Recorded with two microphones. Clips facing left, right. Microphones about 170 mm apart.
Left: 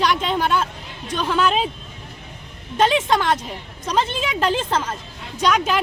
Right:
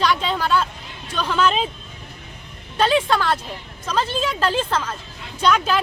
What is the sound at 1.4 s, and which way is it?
Speech, 5° left (ahead or behind).